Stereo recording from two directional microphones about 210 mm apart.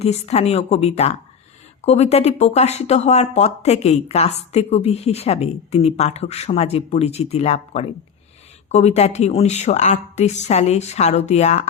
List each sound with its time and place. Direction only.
0.0 s speech: 30° left (ahead or behind)